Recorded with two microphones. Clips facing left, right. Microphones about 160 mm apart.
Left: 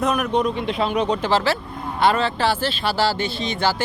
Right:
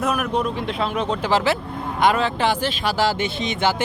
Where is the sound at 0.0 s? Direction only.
5° right (ahead or behind).